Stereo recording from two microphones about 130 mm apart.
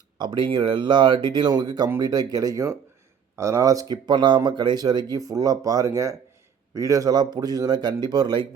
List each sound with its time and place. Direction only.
0.2 s speech: 35° right (ahead or behind)